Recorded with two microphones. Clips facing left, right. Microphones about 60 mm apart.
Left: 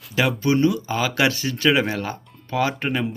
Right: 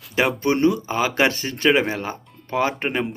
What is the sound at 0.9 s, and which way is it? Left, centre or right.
Speech, right.